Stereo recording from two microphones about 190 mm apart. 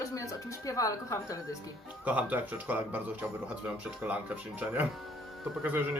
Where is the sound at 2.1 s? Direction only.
10° right (ahead or behind).